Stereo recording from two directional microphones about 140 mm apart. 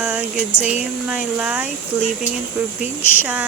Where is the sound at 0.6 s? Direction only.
5° right (ahead or behind).